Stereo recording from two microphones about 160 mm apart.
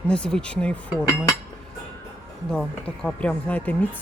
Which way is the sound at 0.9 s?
20° left (ahead or behind).